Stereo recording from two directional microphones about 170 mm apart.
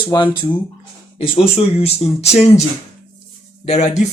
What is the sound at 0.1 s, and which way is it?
Speech, 20° left (ahead or behind).